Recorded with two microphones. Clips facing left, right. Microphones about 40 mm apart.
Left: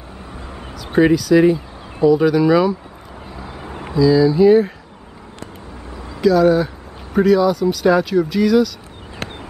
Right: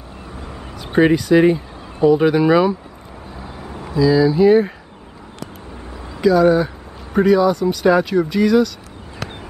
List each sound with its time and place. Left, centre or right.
0.7 s speech: right
3.9 s speech: centre
6.2 s speech: centre